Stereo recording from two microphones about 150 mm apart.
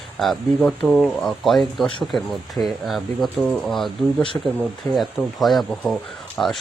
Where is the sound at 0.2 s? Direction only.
5° left (ahead or behind).